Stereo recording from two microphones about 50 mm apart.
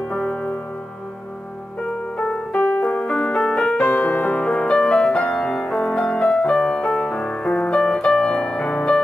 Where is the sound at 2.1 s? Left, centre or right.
Left.